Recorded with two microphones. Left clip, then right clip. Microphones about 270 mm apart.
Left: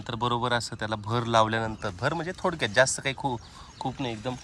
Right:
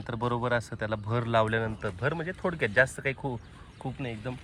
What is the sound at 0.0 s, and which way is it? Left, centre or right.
Speech, centre.